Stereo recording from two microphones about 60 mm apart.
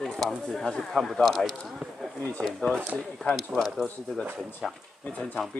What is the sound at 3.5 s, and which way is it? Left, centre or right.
Speech, centre.